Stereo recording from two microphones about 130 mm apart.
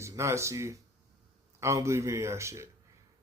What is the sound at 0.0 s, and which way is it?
Speech, 20° right (ahead or behind).